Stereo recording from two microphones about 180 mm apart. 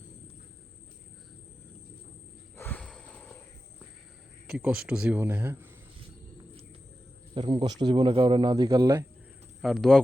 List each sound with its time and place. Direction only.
2.6 s a sound: 10° left (ahead or behind)
4.4 s speech: 5° right (ahead or behind)
7.3 s speech: 25° right (ahead or behind)
9.6 s speech: centre (ahead or behind)